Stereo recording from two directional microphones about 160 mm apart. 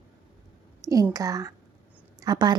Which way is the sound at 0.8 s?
20° right (ahead or behind).